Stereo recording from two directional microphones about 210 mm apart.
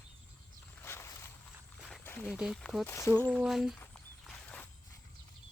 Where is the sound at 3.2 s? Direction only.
5° right (ahead or behind).